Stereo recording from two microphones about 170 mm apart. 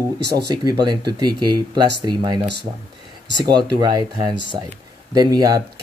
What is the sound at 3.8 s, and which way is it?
Speech, 25° right (ahead or behind).